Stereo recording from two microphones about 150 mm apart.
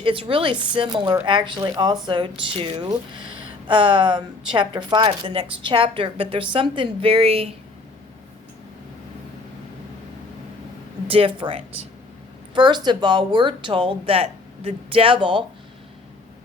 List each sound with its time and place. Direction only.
0.0 s speech: 35° right (ahead or behind)
11.1 s speech: 35° right (ahead or behind)